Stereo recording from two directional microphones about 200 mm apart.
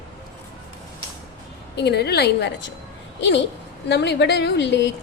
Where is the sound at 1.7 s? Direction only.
55° left (ahead or behind).